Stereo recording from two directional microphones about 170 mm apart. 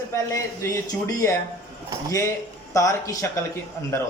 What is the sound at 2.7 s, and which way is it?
Speech, 20° left (ahead or behind).